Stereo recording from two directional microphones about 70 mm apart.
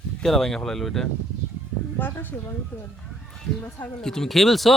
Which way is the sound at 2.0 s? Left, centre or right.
Left.